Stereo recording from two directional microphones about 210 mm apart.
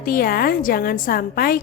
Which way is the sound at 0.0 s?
45° left (ahead or behind).